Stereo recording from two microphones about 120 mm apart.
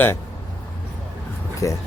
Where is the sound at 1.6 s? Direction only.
30° left (ahead or behind).